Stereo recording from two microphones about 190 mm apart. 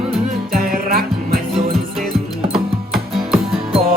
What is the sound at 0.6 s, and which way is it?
Music, 50° right (ahead or behind).